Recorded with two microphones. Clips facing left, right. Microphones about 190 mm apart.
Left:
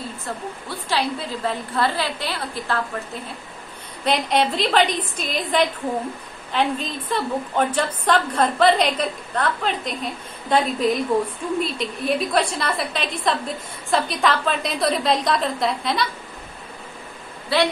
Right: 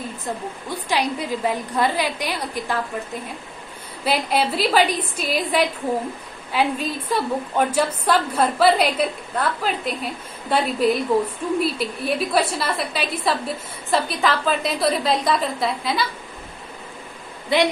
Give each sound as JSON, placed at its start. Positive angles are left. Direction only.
{"t": 0.2, "sound": "a woman's voice", "side_deg": -15}
{"t": 4.0, "sound": "a woman's voice", "side_deg": -5}
{"t": 17.5, "sound": "a woman's voice", "side_deg": -20}